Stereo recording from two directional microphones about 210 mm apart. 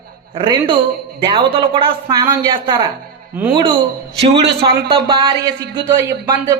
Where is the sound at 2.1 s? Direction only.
20° right (ahead or behind).